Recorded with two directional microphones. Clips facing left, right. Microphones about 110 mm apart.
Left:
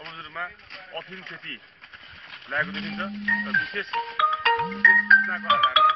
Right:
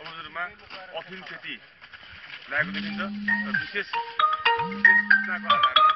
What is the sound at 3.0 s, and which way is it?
Speech, 10° right (ahead or behind).